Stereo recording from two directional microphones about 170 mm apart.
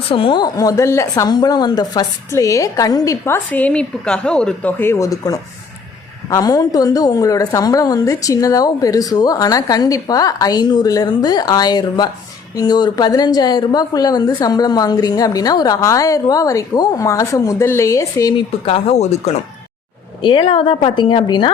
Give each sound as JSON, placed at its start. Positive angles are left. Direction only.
{"t": 0.1, "sound": "a woman's voice", "side_deg": 30}
{"t": 20.2, "sound": "a woman's voice", "side_deg": 25}